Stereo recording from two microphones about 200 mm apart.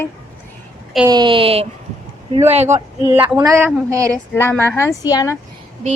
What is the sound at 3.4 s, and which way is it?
Speech, 15° right (ahead or behind).